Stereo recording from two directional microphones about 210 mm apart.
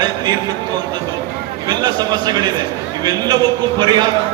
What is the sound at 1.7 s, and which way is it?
A man's voice, 20° right (ahead or behind).